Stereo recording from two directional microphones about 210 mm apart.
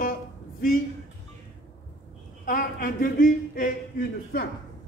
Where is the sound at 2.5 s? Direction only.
45° left (ahead or behind).